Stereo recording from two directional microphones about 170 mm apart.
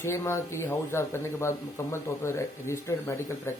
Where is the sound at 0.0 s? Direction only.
15° left (ahead or behind).